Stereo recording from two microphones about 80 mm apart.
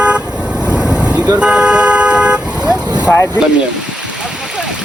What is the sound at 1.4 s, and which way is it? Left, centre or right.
Car, centre.